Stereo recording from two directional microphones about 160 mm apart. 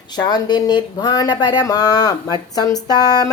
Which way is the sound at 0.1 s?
25° left (ahead or behind).